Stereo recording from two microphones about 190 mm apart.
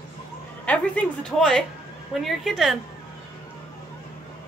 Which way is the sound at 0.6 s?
5° left (ahead or behind).